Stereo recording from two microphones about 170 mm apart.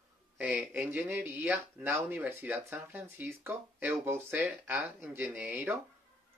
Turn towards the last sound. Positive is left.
turn(degrees=-10)  # may be behind; listen again after turning